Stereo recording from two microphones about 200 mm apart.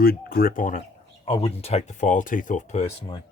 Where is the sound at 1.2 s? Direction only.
30° left (ahead or behind).